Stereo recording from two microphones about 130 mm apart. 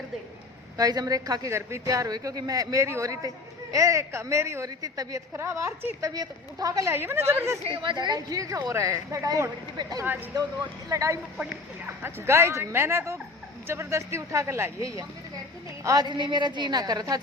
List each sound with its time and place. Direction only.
0.8 s a woman's voice: 30° right (ahead or behind)
7.7 s a woman's voice: 40° right (ahead or behind)